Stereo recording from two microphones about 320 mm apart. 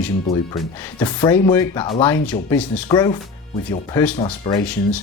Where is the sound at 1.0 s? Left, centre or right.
Centre.